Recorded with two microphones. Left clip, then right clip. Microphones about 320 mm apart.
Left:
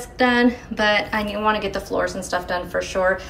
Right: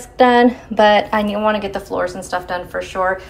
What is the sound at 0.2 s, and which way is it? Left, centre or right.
A woman's voice, centre.